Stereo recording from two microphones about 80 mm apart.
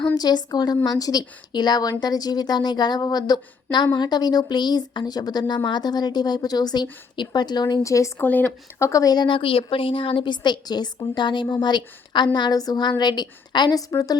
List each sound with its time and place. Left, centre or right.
0.2 s a woman's voice: left
7.8 s a woman's voice: left
8.2 s speech: left
8.8 s speech: left
9.1 s a woman's voice: left
11.4 s a woman's voice: left
13.7 s speech: left